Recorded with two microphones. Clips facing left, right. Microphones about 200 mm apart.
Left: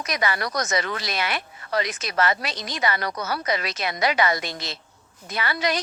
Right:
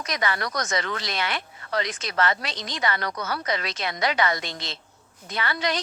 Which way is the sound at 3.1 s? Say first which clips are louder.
Left 2 dB; 25° left (ahead or behind).